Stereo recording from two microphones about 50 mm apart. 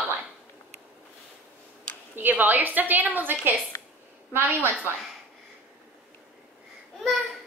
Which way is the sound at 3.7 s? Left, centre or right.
Left.